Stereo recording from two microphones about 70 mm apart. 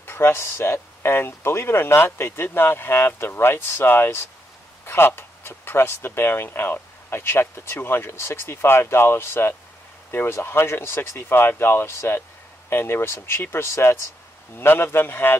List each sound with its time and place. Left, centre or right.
0.0 s speech: left